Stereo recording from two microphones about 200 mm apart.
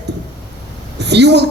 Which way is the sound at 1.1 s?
60° right (ahead or behind).